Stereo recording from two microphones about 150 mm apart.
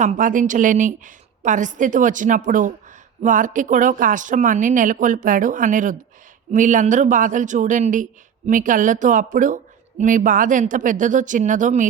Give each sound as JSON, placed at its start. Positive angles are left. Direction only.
{"t": 0.0, "sound": "speech", "side_deg": -60}